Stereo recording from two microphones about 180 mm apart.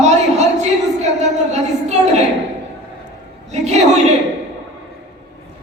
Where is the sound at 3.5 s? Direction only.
40° right (ahead or behind).